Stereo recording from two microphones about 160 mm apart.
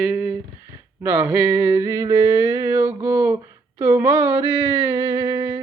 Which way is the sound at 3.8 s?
20° right (ahead or behind).